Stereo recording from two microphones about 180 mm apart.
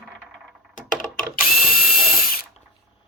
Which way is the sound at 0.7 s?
45° left (ahead or behind).